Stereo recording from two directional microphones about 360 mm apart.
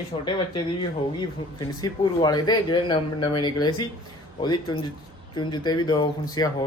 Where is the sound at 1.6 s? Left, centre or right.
Centre.